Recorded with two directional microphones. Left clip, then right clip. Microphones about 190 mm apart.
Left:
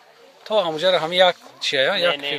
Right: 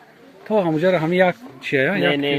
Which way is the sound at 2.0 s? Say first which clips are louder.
Right 2 dB; 55° right (ahead or behind).